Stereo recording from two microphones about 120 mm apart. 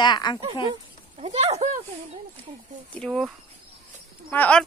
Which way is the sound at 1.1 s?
60° right (ahead or behind).